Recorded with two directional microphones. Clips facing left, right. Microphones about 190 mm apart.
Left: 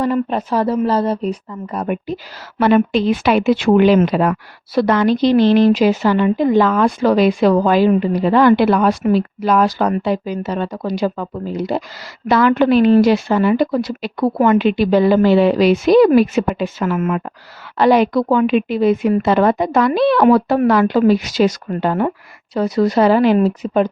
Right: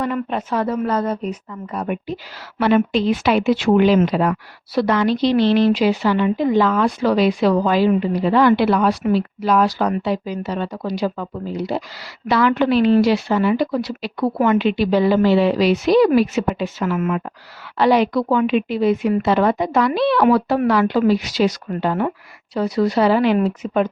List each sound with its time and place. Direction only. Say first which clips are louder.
0.0 s speech: left 5 dB; 35° left (ahead or behind)